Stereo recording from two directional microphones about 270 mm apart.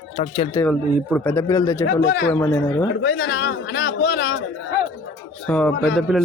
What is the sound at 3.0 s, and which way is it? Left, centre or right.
A man's voice, left.